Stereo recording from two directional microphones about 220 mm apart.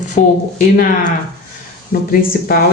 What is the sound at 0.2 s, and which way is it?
Speech, 35° left (ahead or behind).